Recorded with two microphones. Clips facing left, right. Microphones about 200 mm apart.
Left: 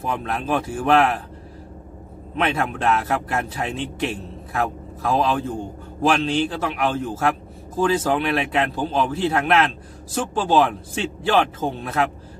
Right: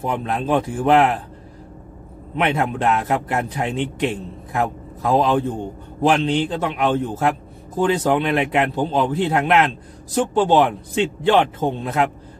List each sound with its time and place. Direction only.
0.0 s a man's voice: 20° right (ahead or behind)
2.3 s a man's voice: 20° right (ahead or behind)